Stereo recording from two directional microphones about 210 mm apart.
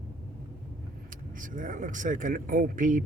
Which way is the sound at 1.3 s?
40° right (ahead or behind).